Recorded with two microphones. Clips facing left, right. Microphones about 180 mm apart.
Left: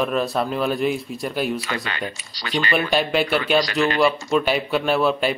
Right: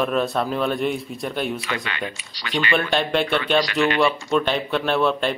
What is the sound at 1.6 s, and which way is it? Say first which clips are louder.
Speech: even; 40° left (ahead or behind).